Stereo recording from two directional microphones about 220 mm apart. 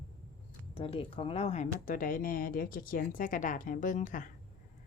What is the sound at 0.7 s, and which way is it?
Speech, 25° left (ahead or behind).